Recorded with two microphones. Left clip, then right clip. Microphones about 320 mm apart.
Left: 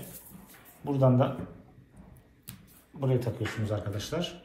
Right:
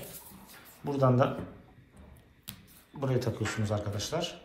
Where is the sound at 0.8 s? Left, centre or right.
Right.